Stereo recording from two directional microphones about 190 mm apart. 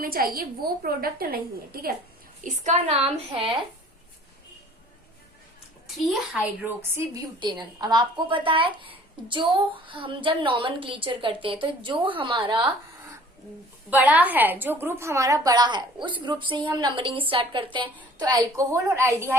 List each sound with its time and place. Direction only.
0.0 s a woman's voice: 50° right (ahead or behind)
2.4 s a woman's voice: 35° right (ahead or behind)
6.1 s a woman's voice: 5° right (ahead or behind)
6.9 s a woman's voice: 20° right (ahead or behind)
13.9 s a woman's voice: 10° right (ahead or behind)